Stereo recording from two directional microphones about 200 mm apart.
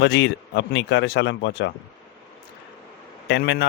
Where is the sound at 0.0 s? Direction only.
60° left (ahead or behind).